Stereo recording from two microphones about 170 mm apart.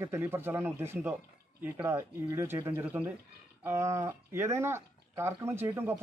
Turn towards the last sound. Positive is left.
turn(degrees=-15)  # may be behind; listen again after turning